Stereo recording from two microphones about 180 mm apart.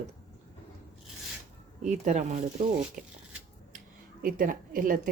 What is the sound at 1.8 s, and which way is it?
Speech, 40° right (ahead or behind).